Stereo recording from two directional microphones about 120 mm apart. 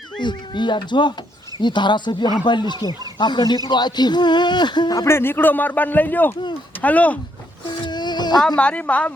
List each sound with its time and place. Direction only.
0.2 s speech: 40° left (ahead or behind)
5.0 s a man's voice: 20° left (ahead or behind)
7.9 s a sound: 35° left (ahead or behind)
8.5 s a man's voice: 10° left (ahead or behind)